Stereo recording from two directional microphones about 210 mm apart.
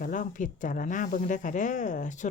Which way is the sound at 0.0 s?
40° left (ahead or behind).